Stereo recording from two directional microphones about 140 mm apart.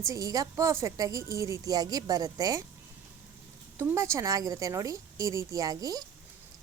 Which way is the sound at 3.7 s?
20° right (ahead or behind).